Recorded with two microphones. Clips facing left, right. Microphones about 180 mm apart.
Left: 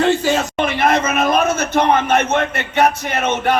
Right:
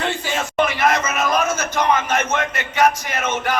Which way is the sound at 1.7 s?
60° left (ahead or behind).